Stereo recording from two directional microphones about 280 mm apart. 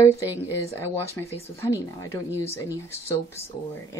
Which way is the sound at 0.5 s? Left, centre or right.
Centre.